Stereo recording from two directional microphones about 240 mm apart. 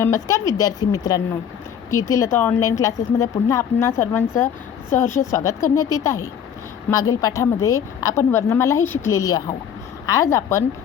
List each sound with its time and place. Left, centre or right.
0.0 s speech: centre